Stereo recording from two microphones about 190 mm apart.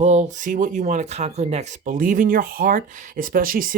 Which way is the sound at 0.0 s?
40° right (ahead or behind).